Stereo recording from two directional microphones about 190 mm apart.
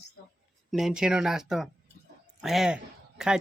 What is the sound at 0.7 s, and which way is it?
Speech, 5° right (ahead or behind).